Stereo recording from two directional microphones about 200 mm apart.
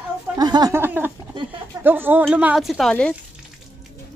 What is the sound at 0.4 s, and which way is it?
Speech, 20° right (ahead or behind).